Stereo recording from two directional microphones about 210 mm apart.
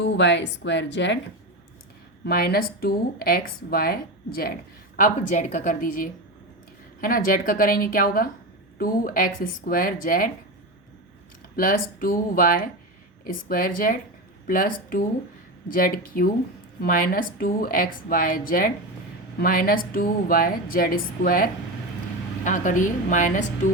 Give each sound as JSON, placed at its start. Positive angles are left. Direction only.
{"t": 0.0, "sound": "a woman's voice", "side_deg": 55}
{"t": 2.2, "sound": "speech", "side_deg": 45}
{"t": 11.5, "sound": "speech", "side_deg": 40}